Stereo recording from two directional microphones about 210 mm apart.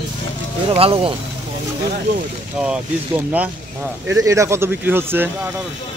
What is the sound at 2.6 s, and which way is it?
Speech, 5° right (ahead or behind).